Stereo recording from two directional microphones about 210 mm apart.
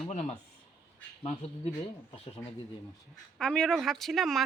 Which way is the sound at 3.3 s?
5° left (ahead or behind).